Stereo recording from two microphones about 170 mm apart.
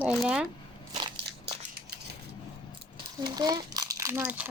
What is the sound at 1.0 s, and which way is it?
Crushing, 35° right (ahead or behind).